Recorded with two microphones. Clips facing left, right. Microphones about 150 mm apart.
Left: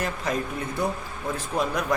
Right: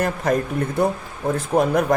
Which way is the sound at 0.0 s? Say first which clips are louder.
Right 7 dB; 50° right (ahead or behind).